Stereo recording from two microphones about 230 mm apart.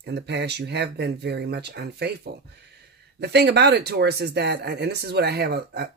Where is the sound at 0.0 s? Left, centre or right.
Right.